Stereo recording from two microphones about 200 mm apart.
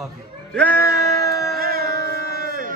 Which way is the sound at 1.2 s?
15° left (ahead or behind).